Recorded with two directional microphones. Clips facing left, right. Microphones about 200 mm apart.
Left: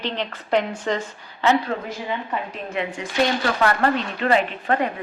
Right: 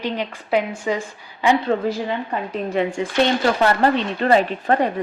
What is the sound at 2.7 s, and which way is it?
Speech, 30° right (ahead or behind).